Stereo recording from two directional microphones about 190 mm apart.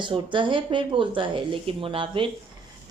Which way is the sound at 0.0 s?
25° right (ahead or behind).